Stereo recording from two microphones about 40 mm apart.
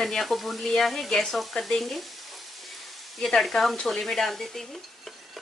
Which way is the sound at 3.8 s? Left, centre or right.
Centre.